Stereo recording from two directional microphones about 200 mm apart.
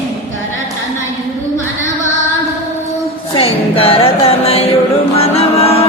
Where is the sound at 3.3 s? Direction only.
30° left (ahead or behind).